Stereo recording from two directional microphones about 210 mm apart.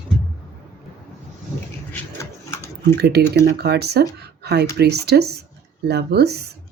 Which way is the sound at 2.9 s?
50° right (ahead or behind).